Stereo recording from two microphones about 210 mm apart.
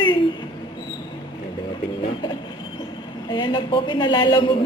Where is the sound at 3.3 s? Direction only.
25° left (ahead or behind).